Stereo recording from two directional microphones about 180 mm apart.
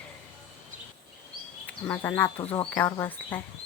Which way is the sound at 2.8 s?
15° left (ahead or behind).